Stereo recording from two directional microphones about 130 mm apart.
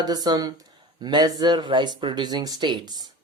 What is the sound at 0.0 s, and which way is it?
Speech, 30° right (ahead or behind).